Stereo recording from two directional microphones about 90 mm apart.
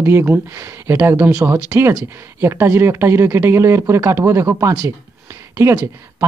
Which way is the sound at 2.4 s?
25° right (ahead or behind).